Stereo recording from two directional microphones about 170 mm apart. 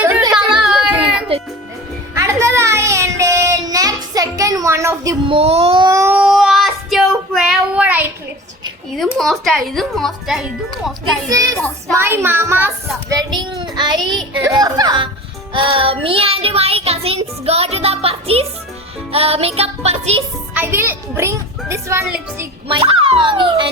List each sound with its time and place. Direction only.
0.2 s music: 20° right (ahead or behind)
0.5 s a sound: 5° right (ahead or behind)
2.1 s child singing: 15° right (ahead or behind)
5.2 s child singing: 35° right (ahead or behind)
5.9 s a sound: 15° right (ahead or behind)
6.2 s child singing: centre (ahead or behind)
9.0 s a woman's voice: centre (ahead or behind)
11.3 s a child's voice: 20° right (ahead or behind)
13.1 s child singing: 25° right (ahead or behind)
14.4 s speech: 20° right (ahead or behind)
15.5 s child singing: 30° right (ahead or behind)
20.5 s a child's voice: 10° right (ahead or behind)
22.7 s child singing: 30° right (ahead or behind)